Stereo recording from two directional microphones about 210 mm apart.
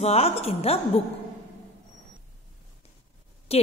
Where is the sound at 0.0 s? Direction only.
30° left (ahead or behind).